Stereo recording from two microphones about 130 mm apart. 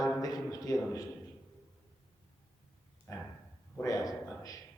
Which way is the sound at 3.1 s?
20° left (ahead or behind).